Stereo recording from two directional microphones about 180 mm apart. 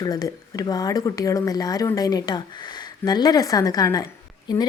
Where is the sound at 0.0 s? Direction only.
20° left (ahead or behind).